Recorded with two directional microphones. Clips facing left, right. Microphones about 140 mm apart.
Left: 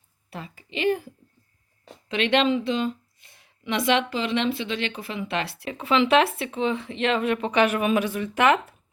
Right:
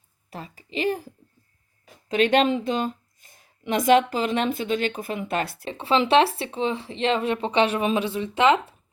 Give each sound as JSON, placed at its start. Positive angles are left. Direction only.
{"t": 0.3, "sound": "speech", "side_deg": -40}
{"t": 5.6, "sound": "speech", "side_deg": -30}